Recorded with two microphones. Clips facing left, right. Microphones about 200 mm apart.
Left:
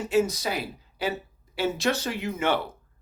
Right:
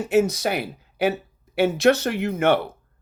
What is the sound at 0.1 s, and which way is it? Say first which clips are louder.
Speech: right 4 dB; 70° right (ahead or behind).